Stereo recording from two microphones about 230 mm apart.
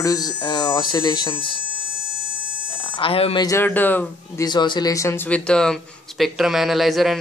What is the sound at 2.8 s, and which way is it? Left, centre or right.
Speech, left.